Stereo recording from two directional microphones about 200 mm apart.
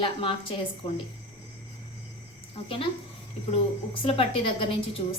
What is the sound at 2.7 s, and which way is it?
Speech, 25° left (ahead or behind).